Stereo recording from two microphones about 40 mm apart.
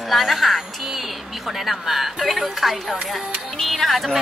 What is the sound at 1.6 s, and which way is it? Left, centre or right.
Speech, centre.